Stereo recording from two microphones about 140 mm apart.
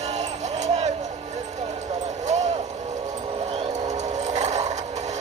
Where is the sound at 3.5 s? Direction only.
55° right (ahead or behind).